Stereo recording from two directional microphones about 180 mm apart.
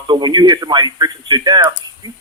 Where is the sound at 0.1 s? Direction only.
25° right (ahead or behind).